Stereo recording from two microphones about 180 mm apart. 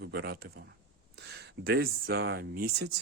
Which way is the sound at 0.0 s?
60° right (ahead or behind).